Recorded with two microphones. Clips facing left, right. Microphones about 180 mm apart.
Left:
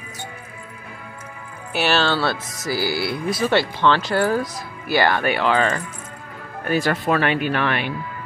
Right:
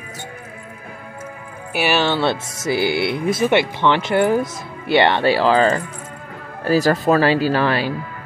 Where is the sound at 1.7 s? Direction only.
15° right (ahead or behind); by 7.9 s 35° right (ahead or behind).